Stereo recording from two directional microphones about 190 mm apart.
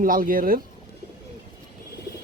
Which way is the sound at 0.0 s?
45° right (ahead or behind).